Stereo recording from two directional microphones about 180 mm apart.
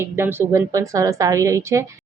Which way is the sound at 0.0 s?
10° right (ahead or behind).